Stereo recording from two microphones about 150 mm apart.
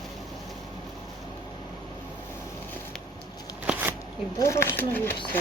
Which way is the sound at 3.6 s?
10° right (ahead or behind).